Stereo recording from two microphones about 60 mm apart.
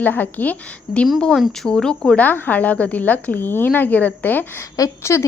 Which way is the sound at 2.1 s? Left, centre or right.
Left.